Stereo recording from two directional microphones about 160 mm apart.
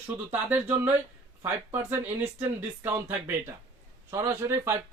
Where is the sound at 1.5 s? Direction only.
15° right (ahead or behind).